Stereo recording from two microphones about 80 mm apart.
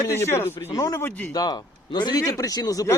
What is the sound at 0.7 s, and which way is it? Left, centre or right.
Speech, left.